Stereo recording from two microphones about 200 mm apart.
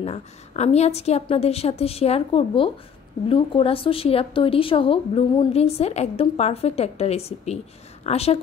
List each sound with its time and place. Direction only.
0.0 s a woman's voice: 30° left (ahead or behind)